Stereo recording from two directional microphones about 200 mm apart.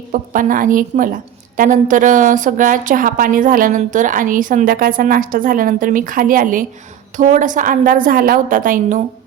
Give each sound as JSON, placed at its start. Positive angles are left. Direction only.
{"t": 0.1, "sound": "a woman's voice", "side_deg": -40}